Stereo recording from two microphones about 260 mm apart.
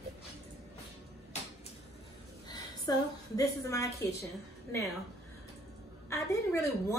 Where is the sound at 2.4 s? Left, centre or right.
Centre.